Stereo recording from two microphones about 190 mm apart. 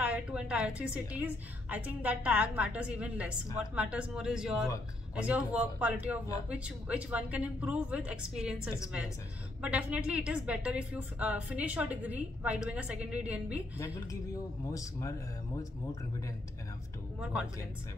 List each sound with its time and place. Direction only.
0.0 s a woman's voice: 5° right (ahead or behind)
9.6 s a woman's voice: 5° right (ahead or behind)
14.7 s speech: 15° left (ahead or behind)
17.2 s a woman's voice: 5° right (ahead or behind)